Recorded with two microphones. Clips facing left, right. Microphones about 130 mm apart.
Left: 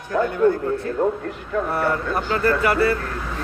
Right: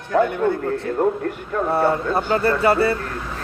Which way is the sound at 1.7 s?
25° right (ahead or behind).